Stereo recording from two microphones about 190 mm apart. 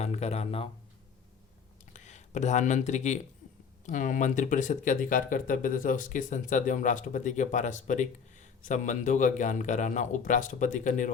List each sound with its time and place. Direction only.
0.0 s speech: 35° left (ahead or behind)
1.9 s speech: 40° left (ahead or behind)